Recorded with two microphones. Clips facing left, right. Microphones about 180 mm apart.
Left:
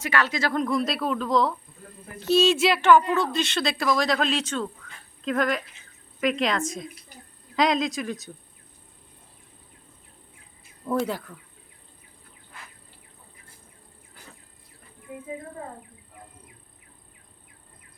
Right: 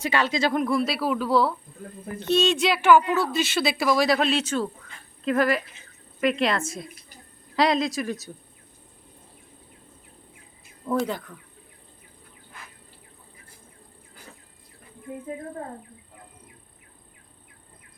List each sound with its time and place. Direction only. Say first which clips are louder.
0.0 s speech: right 2 dB; 25° right (ahead or behind)
0.6 s speech: right 1 dB; 5° right (ahead or behind)
10.8 s speech: even; 5° left (ahead or behind)